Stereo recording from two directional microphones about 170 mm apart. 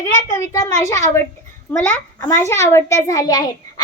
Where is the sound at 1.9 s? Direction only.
5° left (ahead or behind).